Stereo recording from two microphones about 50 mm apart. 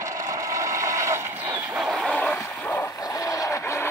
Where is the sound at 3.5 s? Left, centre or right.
Left.